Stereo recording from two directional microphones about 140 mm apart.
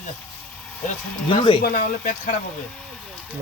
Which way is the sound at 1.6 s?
75° left (ahead or behind).